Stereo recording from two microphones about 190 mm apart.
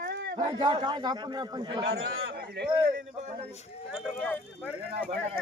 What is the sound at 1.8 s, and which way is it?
Speech, 90° right.